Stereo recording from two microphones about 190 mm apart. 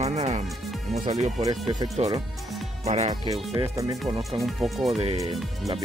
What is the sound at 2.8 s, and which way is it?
Speech, 35° right (ahead or behind).